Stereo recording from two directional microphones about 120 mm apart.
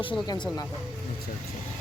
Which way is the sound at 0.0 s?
40° left (ahead or behind).